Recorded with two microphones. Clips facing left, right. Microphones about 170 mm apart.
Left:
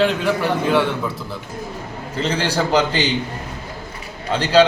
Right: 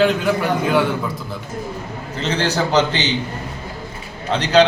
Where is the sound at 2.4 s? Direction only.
10° left (ahead or behind).